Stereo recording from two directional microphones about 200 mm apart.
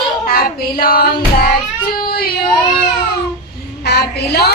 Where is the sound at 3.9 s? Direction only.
55° left (ahead or behind).